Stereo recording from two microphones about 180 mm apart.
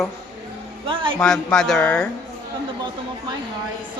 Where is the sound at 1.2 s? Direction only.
5° left (ahead or behind).